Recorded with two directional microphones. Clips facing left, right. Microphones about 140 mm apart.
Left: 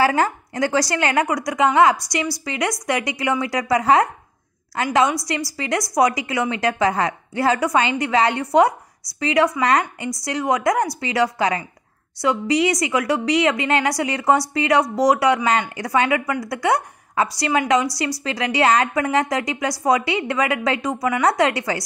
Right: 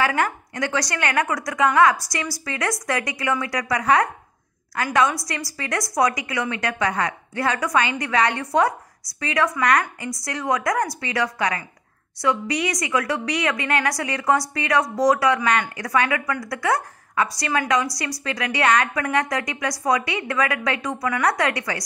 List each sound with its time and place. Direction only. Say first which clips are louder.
0.0 s a woman's voice: left 4 dB; 30° left (ahead or behind)